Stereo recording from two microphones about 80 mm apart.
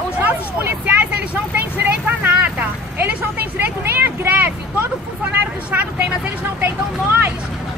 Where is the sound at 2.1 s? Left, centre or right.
Right.